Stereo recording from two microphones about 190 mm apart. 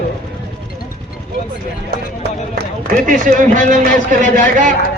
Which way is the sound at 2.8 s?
45° right (ahead or behind).